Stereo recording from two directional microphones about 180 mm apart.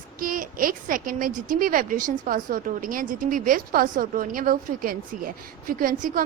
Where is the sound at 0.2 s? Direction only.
50° right (ahead or behind).